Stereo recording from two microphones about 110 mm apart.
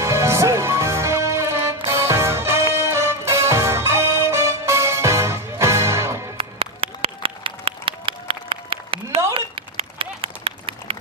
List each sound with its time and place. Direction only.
0.0 s music: 25° right (ahead or behind)
6.3 s music: 60° right (ahead or behind)
9.3 s a sound: 55° right (ahead or behind)